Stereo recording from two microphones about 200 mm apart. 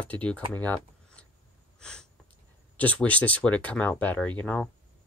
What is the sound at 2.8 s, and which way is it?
Speech, 5° left (ahead or behind).